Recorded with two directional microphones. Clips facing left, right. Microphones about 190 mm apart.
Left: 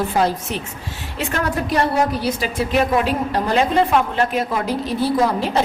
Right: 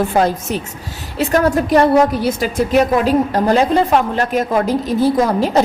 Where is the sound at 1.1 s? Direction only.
40° right (ahead or behind).